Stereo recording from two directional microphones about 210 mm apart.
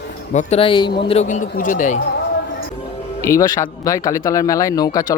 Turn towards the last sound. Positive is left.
turn(degrees=15)  # may be behind; listen again after turning